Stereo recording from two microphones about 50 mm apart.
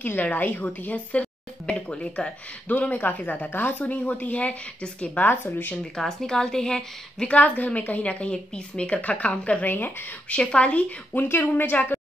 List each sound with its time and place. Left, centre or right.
0.0 s a woman's voice: left
2.7 s a woman's voice: left
5.9 s a woman's voice: centre
7.2 s a woman's voice: left
9.7 s a woman's voice: left
10.5 s a woman's voice: left
11.1 s a woman's voice: left